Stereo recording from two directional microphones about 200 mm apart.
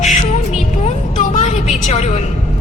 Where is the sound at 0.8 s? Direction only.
35° left (ahead or behind).